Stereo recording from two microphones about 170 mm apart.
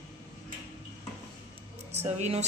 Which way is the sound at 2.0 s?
40° right (ahead or behind).